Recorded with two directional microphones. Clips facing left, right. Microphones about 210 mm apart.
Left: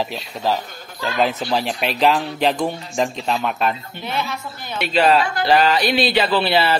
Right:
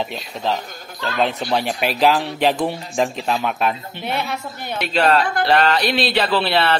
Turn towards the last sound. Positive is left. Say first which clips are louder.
# left 1 dB
turn(degrees=0)  # may be behind; listen again after turning